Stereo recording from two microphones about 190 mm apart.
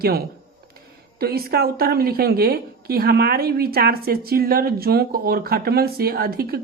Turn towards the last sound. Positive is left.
turn(degrees=-50)  # may be behind; listen again after turning